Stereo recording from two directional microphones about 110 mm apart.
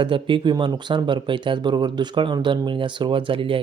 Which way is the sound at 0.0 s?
50° right (ahead or behind).